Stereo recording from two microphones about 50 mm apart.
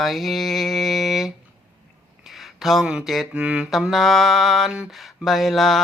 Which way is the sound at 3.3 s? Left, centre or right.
Right.